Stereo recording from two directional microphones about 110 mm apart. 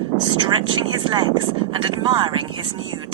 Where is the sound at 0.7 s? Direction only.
45° right (ahead or behind).